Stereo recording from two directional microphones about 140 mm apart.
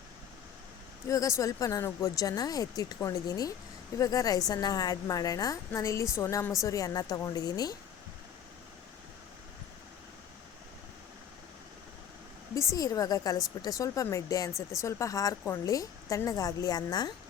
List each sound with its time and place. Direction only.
1.0 s a woman's voice: 25° left (ahead or behind)
12.7 s a woman's voice: 25° left (ahead or behind)